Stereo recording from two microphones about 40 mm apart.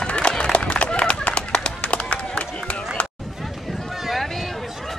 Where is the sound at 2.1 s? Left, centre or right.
Left.